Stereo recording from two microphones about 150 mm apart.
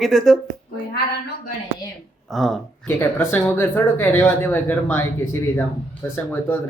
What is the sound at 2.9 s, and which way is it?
Speech, 15° left (ahead or behind).